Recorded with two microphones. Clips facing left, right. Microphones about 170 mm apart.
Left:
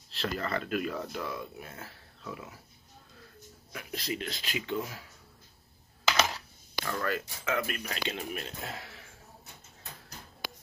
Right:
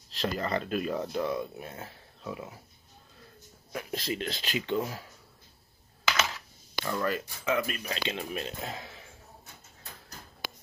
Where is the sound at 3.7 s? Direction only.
25° right (ahead or behind).